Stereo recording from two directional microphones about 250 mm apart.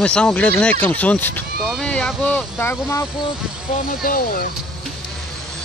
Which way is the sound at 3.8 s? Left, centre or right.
Left.